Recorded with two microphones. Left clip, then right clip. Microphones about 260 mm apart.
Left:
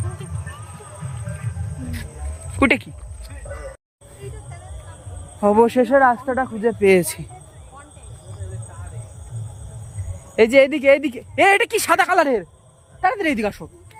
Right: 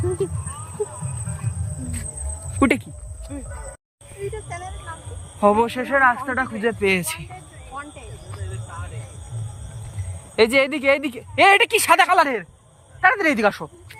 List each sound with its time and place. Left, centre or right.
2.6 s speech: centre
5.4 s speech: centre
10.3 s speech: centre